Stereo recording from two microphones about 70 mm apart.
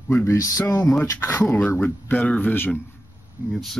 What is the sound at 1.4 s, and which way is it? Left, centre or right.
Speech, centre.